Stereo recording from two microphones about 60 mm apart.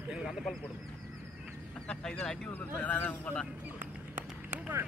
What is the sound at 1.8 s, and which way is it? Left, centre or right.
Speech, centre.